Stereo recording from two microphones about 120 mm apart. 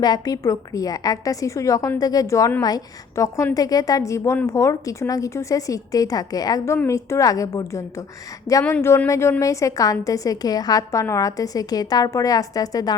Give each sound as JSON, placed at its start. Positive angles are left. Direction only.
{"t": 0.0, "sound": "a woman's voice", "side_deg": 30}